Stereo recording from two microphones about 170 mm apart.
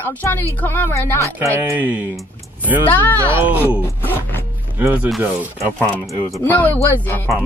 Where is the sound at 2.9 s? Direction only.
10° left (ahead or behind).